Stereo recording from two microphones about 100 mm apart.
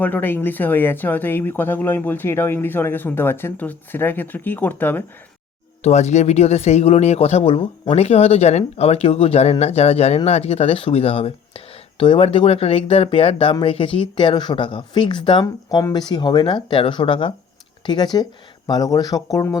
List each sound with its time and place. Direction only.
0.0 s speech: 20° left (ahead or behind)
5.8 s speech: 90° left; by 15.4 s 55° left (ahead or behind)
15.7 s speech: 40° left (ahead or behind); by 17.3 s 60° left (ahead or behind)
17.8 s speech: 45° left (ahead or behind)